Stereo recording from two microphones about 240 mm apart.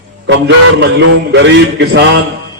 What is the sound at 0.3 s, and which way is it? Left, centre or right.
A man's voice, right.